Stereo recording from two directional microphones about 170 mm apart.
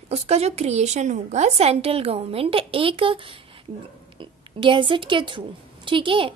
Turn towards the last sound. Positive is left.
turn(degrees=-30)  # may be behind; listen again after turning